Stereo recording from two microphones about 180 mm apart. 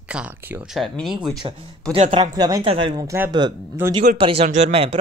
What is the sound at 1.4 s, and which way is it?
Speech, 30° right (ahead or behind).